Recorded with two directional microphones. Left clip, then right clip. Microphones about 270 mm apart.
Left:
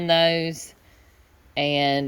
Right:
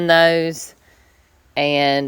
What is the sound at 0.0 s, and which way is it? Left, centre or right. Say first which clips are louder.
Speech: right 6 dB; centre.